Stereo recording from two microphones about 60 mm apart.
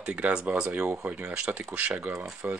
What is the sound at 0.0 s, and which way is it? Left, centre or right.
Speech, centre.